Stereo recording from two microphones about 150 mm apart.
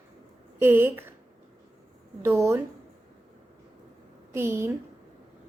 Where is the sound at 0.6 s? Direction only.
15° right (ahead or behind).